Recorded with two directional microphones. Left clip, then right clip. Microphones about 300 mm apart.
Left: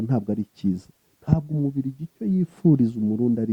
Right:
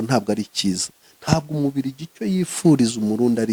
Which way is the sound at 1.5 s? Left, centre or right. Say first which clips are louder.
Right 4 dB; right.